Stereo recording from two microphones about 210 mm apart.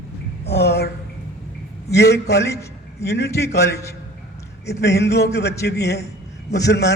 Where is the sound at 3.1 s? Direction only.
55° left (ahead or behind).